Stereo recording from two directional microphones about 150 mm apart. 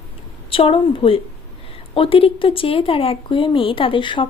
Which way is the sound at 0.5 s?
35° left (ahead or behind).